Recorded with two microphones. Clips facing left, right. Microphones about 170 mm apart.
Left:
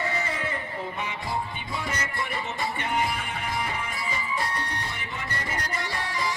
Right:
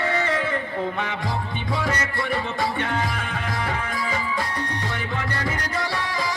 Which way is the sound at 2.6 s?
90° right.